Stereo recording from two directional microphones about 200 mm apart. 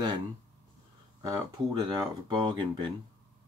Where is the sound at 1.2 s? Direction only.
20° right (ahead or behind).